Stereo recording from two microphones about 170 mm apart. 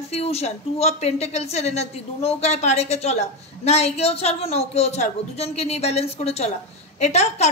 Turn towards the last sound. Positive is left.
turn(degrees=40)  # may be behind; listen again after turning